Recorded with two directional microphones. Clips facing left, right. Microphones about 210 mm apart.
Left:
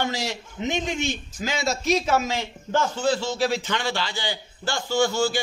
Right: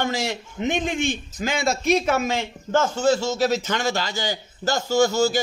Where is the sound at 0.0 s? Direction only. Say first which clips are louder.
Right 2 dB; 50° right (ahead or behind).